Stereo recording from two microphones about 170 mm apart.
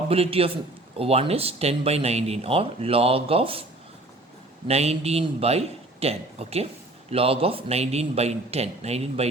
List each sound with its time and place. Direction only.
0.1 s speech: 35° right (ahead or behind)
4.7 s speech: 40° right (ahead or behind)